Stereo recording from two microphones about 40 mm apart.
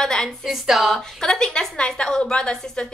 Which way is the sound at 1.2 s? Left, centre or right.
Centre.